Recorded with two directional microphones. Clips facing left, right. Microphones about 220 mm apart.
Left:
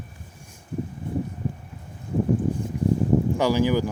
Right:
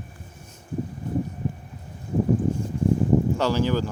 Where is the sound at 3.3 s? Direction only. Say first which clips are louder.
Left 2 dB; 10° left (ahead or behind).